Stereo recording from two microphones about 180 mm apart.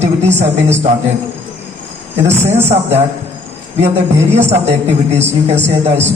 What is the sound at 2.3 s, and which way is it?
Speech, 15° right (ahead or behind).